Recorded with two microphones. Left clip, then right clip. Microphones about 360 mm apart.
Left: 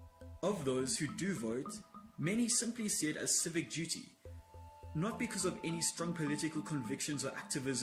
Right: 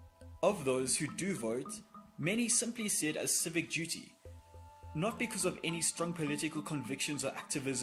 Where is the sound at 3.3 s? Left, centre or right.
Centre.